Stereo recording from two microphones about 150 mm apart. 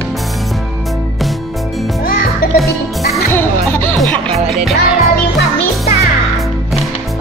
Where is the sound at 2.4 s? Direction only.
70° left (ahead or behind).